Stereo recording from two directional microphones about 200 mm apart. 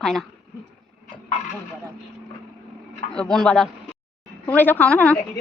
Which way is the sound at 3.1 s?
5° left (ahead or behind).